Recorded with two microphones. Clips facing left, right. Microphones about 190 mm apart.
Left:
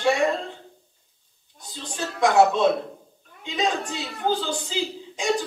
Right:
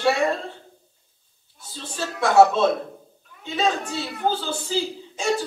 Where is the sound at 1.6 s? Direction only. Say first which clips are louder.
Right 1 dB; 15° left (ahead or behind).